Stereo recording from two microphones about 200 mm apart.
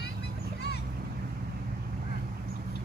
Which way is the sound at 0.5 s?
55° left (ahead or behind).